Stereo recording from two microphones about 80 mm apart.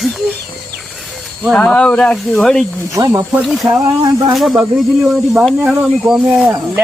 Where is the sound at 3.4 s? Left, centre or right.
Centre.